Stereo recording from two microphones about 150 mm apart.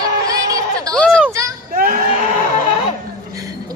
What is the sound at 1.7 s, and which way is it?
Sheep, 70° right (ahead or behind).